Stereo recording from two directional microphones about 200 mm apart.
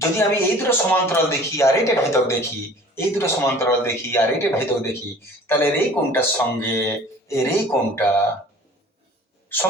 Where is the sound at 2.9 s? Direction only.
15° left (ahead or behind).